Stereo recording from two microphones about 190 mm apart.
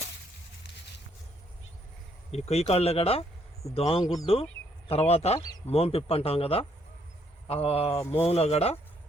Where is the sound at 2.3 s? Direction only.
35° left (ahead or behind).